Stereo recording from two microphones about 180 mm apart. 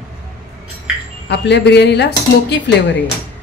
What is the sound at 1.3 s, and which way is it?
Speech, 75° left (ahead or behind).